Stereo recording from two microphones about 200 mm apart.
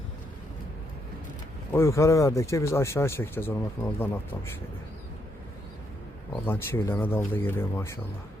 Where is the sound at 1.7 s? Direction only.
15° left (ahead or behind).